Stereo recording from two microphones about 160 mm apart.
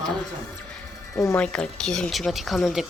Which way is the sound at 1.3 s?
5° left (ahead or behind).